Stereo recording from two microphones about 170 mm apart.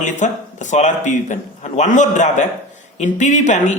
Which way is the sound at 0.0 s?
45° left (ahead or behind).